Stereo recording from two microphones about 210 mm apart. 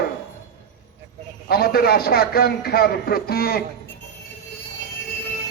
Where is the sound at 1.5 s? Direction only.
45° left (ahead or behind).